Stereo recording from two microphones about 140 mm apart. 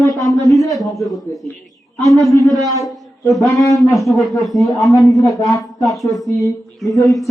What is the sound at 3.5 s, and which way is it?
A man's voice, centre (ahead or behind).